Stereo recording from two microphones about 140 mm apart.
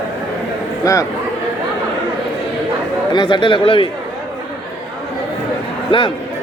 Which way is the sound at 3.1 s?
35° left (ahead or behind).